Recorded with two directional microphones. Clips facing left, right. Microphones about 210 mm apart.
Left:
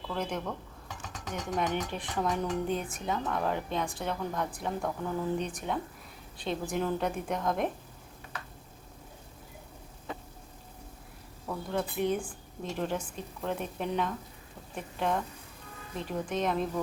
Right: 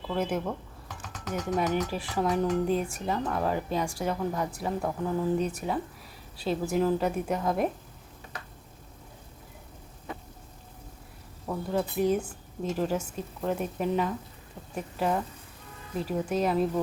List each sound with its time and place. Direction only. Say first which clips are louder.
0.1 s speech: right 5 dB; 5° right (ahead or behind)
11.4 s speech: right 3 dB; 5° right (ahead or behind)